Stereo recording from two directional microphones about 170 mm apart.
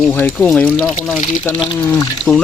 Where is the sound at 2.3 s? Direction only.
Centre (ahead or behind).